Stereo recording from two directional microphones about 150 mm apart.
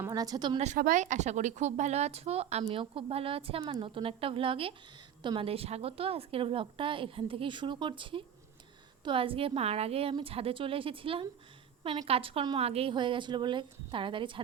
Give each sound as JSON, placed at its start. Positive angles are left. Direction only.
{"t": 0.0, "sound": "a woman's voice", "side_deg": -25}
{"t": 0.8, "sound": "a woman's voice", "side_deg": -60}